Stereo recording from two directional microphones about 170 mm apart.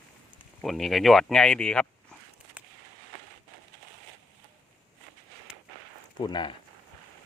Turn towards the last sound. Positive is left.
turn(degrees=30)  # may be behind; listen again after turning